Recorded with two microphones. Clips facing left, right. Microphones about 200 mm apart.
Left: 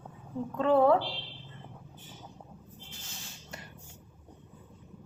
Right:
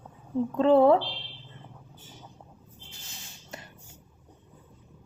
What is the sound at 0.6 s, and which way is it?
Speech, 25° right (ahead or behind).